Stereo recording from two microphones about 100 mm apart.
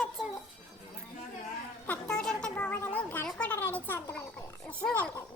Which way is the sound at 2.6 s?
20° left (ahead or behind).